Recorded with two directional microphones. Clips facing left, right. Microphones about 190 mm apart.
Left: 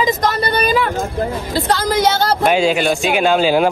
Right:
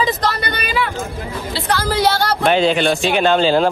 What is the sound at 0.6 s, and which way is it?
Speech, 45° left (ahead or behind).